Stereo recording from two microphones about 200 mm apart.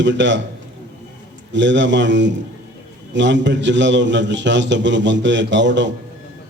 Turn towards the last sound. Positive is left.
turn(degrees=-65)  # may be behind; listen again after turning